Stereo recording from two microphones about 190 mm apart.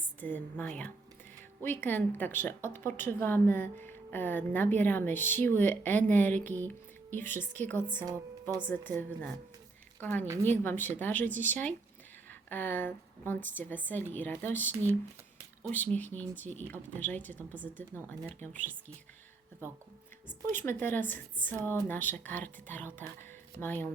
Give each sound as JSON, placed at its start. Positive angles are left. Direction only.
{"t": 0.2, "sound": "a woman's voice", "side_deg": 10}
{"t": 8.0, "sound": "speech", "side_deg": -20}
{"t": 8.6, "sound": "a woman's voice", "side_deg": 10}
{"t": 15.7, "sound": "a woman's voice", "side_deg": 10}
{"t": 20.5, "sound": "a woman's voice", "side_deg": 10}